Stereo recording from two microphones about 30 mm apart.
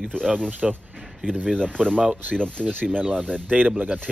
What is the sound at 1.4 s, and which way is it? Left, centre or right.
Speech, left.